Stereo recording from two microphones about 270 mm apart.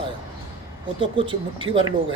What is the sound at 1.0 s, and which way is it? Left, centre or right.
Speech, centre.